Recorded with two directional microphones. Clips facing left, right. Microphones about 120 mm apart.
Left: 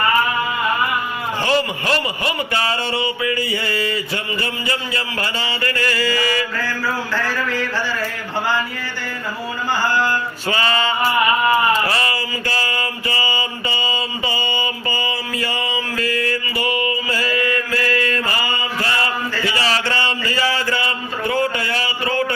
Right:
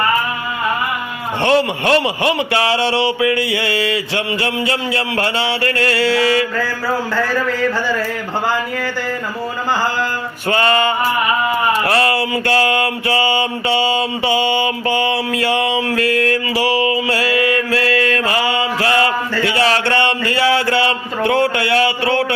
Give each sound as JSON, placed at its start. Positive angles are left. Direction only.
{"t": 1.5, "sound": "mantra", "side_deg": -65}
{"t": 10.5, "sound": "male singing", "side_deg": -55}
{"t": 11.7, "sound": "mantra", "side_deg": -65}